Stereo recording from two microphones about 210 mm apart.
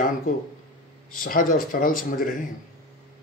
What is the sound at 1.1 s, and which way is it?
Speech, 40° left (ahead or behind).